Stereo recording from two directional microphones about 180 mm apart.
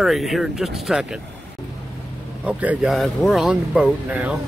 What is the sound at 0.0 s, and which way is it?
Speech, centre (ahead or behind).